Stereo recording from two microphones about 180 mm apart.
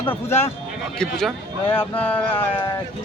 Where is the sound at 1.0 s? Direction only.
5° left (ahead or behind).